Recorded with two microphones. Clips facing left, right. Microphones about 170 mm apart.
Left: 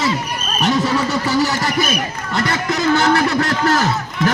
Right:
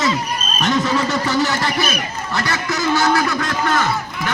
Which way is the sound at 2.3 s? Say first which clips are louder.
Left 3 dB; 25° left (ahead or behind).